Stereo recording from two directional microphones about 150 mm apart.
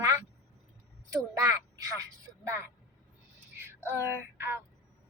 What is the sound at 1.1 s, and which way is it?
A woman's voice, 20° right (ahead or behind).